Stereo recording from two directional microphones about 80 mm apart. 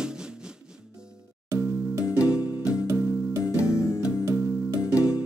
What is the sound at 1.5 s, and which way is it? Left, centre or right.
Music, right.